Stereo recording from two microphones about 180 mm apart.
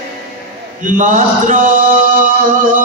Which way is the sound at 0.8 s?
45° right (ahead or behind).